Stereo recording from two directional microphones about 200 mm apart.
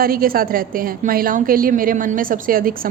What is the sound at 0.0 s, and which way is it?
A woman's voice, 50° right (ahead or behind).